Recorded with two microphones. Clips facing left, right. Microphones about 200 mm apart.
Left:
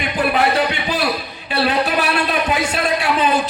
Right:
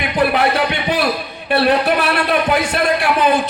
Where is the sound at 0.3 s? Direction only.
60° right (ahead or behind).